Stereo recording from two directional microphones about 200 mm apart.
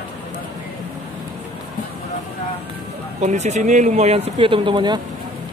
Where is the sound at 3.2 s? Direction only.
35° right (ahead or behind).